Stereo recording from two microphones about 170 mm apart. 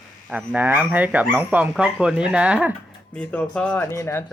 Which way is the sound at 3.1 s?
10° left (ahead or behind).